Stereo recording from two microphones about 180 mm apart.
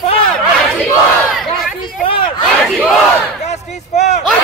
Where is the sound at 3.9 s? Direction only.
40° left (ahead or behind).